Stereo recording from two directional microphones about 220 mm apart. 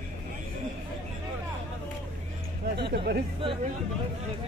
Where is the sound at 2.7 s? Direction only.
50° right (ahead or behind).